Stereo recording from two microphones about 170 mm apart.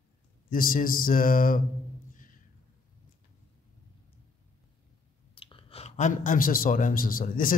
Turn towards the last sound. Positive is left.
turn(degrees=55)  # may be behind; listen again after turning